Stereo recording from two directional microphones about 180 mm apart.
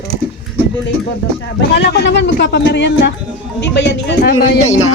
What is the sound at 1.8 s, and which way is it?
A woman's voice, 75° left (ahead or behind).